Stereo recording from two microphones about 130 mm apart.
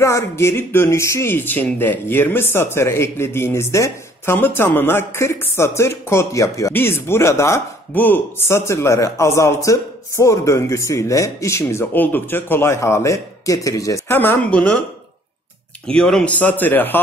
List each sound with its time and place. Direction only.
0.0 s speech: 20° left (ahead or behind)
15.9 s a man's voice: 5° left (ahead or behind)